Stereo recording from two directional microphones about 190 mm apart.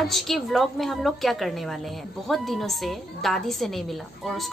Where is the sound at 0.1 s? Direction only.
Centre (ahead or behind).